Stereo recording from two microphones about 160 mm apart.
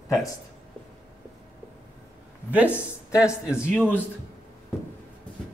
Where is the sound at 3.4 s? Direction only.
5° right (ahead or behind).